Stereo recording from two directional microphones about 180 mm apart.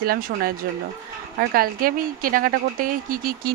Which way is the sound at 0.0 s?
55° right (ahead or behind).